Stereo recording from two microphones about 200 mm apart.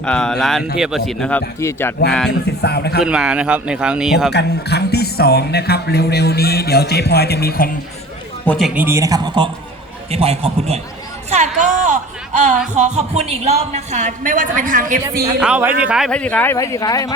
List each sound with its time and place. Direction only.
0.0 s speech: 5° left (ahead or behind)
2.6 s a man's voice: 55° left (ahead or behind)
3.0 s speech: 5° right (ahead or behind)
4.3 s a man's voice: 55° left (ahead or behind)
8.4 s a man's voice: centre (ahead or behind); by 11.7 s 35° right (ahead or behind)
11.8 s a sound: 35° right (ahead or behind)
12.7 s a woman's voice: 35° right (ahead or behind)
15.4 s a man's voice: 5° right (ahead or behind); by 17.2 s 20° left (ahead or behind)